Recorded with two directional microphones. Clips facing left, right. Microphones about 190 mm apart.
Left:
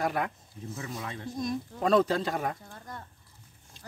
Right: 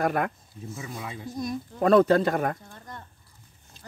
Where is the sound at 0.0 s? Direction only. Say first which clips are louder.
Right 4 dB; 55° right (ahead or behind).